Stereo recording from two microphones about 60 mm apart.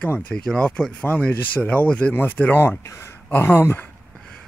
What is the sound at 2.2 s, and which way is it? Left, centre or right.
Speech, left.